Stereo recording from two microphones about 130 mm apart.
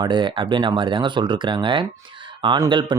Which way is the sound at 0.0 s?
35° right (ahead or behind).